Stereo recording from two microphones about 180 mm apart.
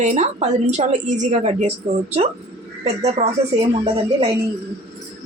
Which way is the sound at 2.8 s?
35° right (ahead or behind).